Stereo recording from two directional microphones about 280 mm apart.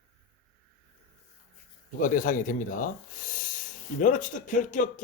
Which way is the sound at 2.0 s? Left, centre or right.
Left.